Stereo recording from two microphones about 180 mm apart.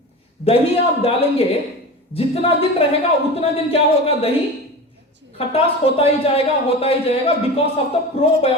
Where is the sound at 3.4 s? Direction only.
35° left (ahead or behind).